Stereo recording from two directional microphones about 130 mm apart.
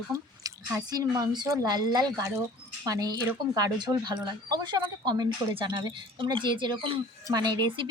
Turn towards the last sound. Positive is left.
turn(degrees=-35)  # may be behind; listen again after turning